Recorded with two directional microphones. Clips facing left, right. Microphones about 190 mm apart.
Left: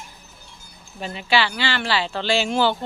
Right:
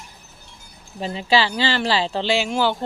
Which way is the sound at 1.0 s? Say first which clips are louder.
Right 2 dB; 30° right (ahead or behind).